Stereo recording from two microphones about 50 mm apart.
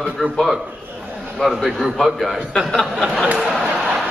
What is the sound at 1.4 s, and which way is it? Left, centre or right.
A man's voice, centre.